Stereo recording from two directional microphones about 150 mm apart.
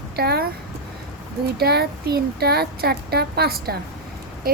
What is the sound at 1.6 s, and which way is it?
A child's voice, 90° right.